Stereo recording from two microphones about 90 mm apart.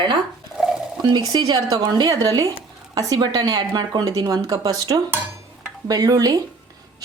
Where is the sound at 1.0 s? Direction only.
50° right (ahead or behind).